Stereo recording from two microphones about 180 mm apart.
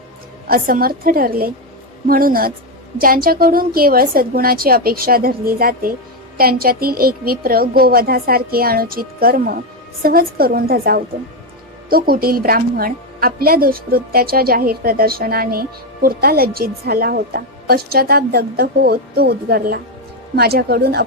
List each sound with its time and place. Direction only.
0.4 s a woman's voice: 55° right (ahead or behind)